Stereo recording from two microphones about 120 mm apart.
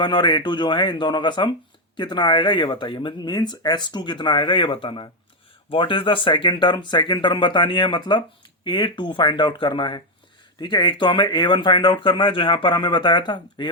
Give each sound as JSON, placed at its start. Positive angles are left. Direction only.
{"t": 0.0, "sound": "speech", "side_deg": 40}